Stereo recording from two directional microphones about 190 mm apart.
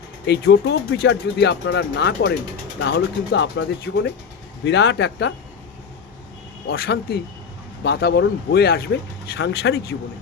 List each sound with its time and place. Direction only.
0.3 s speech: 60° left (ahead or behind)
6.7 s speech: 55° left (ahead or behind)